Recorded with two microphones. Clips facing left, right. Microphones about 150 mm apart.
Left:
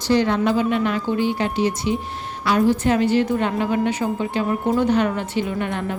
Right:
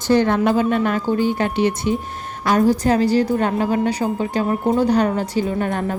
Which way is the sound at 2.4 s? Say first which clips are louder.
Right 2 dB; 45° right (ahead or behind).